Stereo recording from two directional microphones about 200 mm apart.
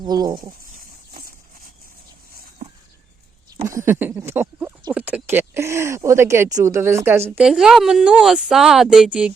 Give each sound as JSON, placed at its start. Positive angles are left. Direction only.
{"t": 0.0, "sound": "speech", "side_deg": -20}
{"t": 1.1, "sound": "a sound", "side_deg": -45}
{"t": 3.7, "sound": "speech", "side_deg": -15}